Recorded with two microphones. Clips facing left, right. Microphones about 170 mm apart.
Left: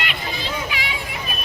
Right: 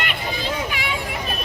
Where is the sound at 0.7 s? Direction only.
50° right (ahead or behind).